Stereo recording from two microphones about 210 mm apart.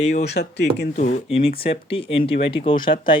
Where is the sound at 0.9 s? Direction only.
35° left (ahead or behind).